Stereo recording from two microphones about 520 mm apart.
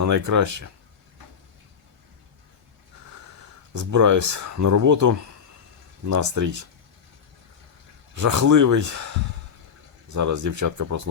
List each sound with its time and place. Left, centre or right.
0.0 s speech: right
3.8 s speech: right
8.1 s speech: right